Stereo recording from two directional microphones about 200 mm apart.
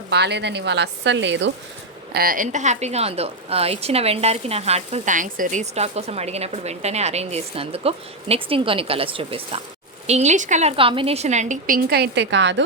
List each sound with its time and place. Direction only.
0.1 s speech: 55° right (ahead or behind)
2.1 s a woman's voice: 45° right (ahead or behind); by 12.6 s 65° right (ahead or behind)